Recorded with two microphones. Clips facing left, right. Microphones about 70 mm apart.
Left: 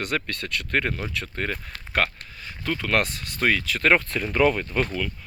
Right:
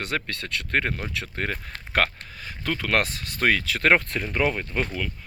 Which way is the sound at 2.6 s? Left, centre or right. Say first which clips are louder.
Even; right.